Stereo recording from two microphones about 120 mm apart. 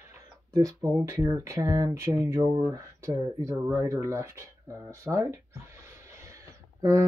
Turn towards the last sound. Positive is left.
turn(degrees=-25)  # may be behind; listen again after turning